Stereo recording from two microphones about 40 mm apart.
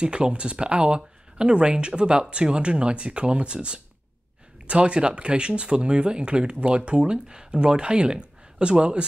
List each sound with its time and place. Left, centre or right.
0.0 s speech: right